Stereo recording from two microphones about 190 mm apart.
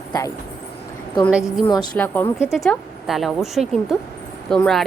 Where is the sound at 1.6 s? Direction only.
20° left (ahead or behind).